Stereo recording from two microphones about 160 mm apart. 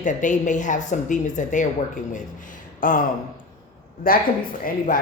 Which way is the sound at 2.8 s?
60° left (ahead or behind).